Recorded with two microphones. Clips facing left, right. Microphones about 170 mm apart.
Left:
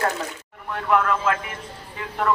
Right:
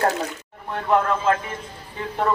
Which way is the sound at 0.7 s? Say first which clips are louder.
Right 1 dB; 30° right (ahead or behind).